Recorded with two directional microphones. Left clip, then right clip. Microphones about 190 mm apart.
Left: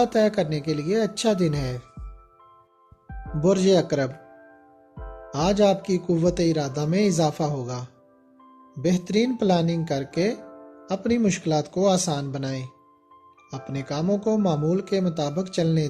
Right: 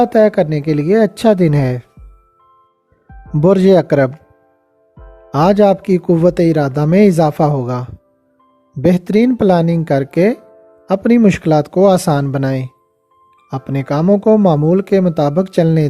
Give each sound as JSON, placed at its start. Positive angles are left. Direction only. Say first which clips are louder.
{"t": 0.0, "sound": "speech", "louder": "right 10 dB", "side_deg": -45}
{"t": 3.4, "sound": "speech", "louder": "right 10 dB", "side_deg": -45}
{"t": 4.9, "sound": "music", "louder": "left 1 dB", "side_deg": 0}
{"t": 5.3, "sound": "speech", "louder": "right 10 dB", "side_deg": -50}